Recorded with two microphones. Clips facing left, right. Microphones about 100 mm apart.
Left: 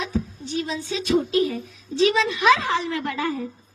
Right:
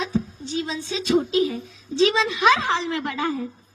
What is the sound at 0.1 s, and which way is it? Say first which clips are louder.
A woman's voice: right 1 dB; 25° right (ahead or behind).